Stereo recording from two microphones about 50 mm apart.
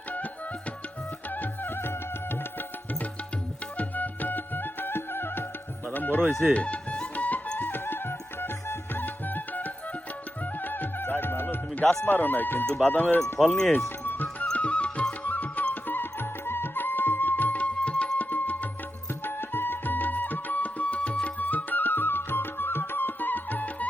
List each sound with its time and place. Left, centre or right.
1.3 s music: left
3.8 s music: left
5.9 s chicken: left
6.5 s music: left
7.6 s music: left
9.0 s music: left
11.7 s music: left
12.0 s speech: left
13.4 s speech: centre
13.8 s music: left
14.5 s music: left
15.2 s music: left
19.2 s music: left